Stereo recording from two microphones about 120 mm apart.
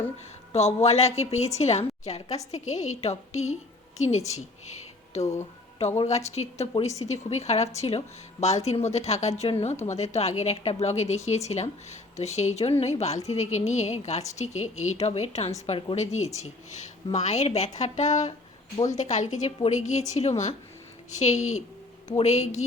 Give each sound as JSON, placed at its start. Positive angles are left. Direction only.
{"t": 0.5, "sound": "a woman's voice", "side_deg": 65}
{"t": 5.2, "sound": "speech", "side_deg": 25}
{"t": 6.1, "sound": "a woman's voice", "side_deg": 65}
{"t": 9.8, "sound": "a woman's voice", "side_deg": 70}